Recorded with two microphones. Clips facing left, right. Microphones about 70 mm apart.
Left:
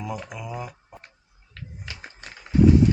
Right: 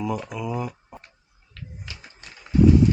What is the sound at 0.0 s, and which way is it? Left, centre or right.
Speech, centre.